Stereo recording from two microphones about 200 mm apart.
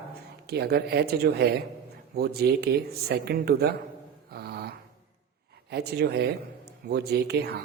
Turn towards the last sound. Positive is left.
turn(degrees=-55)  # may be behind; listen again after turning